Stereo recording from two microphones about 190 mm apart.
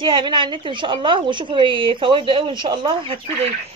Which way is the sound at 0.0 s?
25° right (ahead or behind).